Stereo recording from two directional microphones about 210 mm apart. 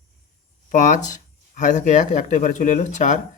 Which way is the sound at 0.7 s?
35° left (ahead or behind).